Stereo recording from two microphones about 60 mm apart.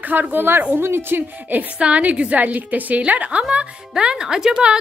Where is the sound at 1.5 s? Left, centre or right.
Right.